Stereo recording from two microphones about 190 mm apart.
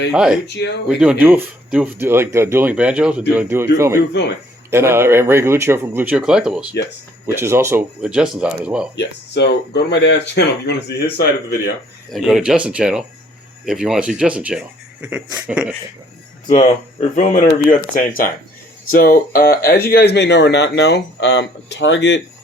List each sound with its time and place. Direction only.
0.1 s speech: 5° right (ahead or behind)
0.4 s speech: 65° left (ahead or behind)
0.9 s speech: 5° right (ahead or behind)
9.0 s speech: 65° left (ahead or behind)
12.1 s speech: centre (ahead or behind)
16.5 s speech: 40° left (ahead or behind); by 22.2 s 70° left (ahead or behind)